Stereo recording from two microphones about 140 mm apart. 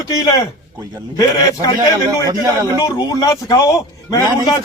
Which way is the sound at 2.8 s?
25° left (ahead or behind).